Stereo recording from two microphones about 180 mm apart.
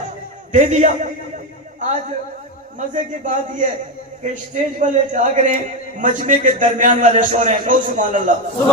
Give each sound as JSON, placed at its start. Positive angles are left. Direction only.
{"t": 0.5, "sound": "a man's voice", "side_deg": -40}